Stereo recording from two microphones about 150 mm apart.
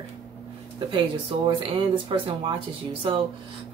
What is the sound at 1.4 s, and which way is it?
Speech, 35° right (ahead or behind).